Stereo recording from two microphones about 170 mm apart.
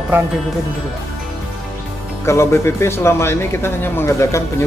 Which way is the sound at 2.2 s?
15° left (ahead or behind).